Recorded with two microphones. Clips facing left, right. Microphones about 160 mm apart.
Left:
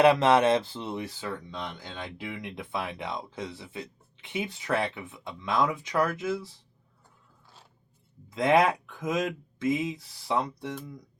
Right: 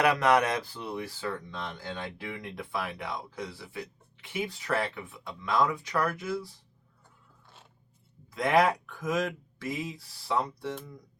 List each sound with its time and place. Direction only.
0.0 s speech: 25° left (ahead or behind)
8.3 s speech: 20° left (ahead or behind)